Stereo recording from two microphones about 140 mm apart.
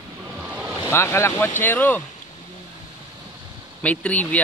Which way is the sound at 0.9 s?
20° left (ahead or behind).